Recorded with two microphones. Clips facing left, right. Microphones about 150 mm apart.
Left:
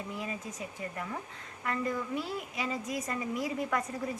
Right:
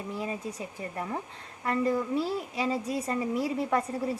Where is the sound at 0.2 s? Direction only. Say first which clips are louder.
Right 4 dB; 30° right (ahead or behind).